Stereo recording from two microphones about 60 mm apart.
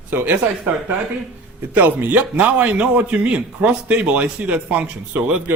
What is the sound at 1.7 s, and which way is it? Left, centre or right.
A man's voice, right.